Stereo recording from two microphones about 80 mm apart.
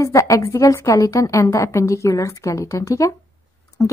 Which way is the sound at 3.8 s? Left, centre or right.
Left.